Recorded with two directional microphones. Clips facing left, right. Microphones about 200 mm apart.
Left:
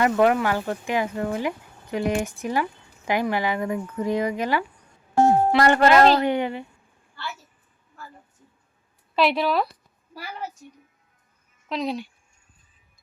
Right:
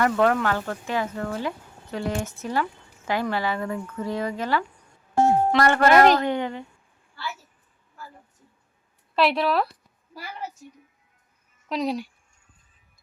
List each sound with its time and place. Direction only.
0.0 s speech: 15° left (ahead or behind)
9.1 s a woman's voice: centre (ahead or behind)
11.7 s speech: 10° right (ahead or behind)